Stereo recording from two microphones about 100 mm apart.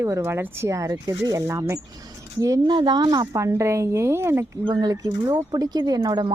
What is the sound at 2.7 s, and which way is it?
Speech, 45° right (ahead or behind).